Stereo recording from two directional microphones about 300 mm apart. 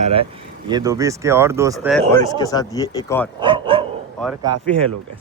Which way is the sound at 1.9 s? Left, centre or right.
Centre.